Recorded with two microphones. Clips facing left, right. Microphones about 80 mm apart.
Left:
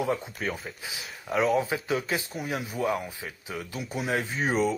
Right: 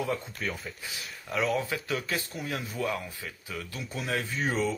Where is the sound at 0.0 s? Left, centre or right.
Left.